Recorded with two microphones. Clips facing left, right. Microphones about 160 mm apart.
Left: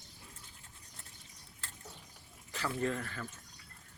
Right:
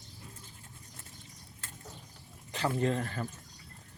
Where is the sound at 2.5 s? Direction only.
25° right (ahead or behind).